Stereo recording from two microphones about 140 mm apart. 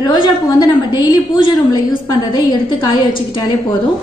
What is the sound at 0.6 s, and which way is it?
A woman's voice, 30° left (ahead or behind).